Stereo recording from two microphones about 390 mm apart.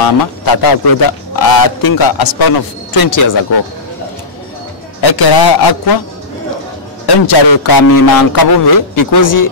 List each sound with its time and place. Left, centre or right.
0.5 s a man's voice: left
5.0 s a man's voice: left
7.1 s a man's voice: left